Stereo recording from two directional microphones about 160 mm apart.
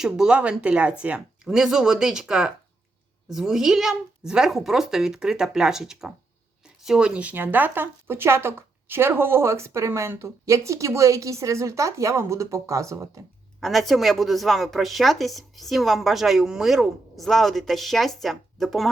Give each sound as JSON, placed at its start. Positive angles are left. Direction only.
{"t": 0.0, "sound": "a woman's voice", "side_deg": -5}
{"t": 13.6, "sound": "a woman's voice", "side_deg": 0}